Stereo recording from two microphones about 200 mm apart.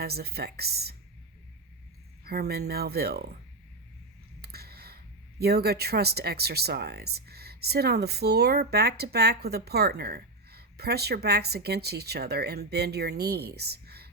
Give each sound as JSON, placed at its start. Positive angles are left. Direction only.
{"t": 0.0, "sound": "speech", "side_deg": -50}
{"t": 2.2, "sound": "speech", "side_deg": -50}
{"t": 4.4, "sound": "speech", "side_deg": -50}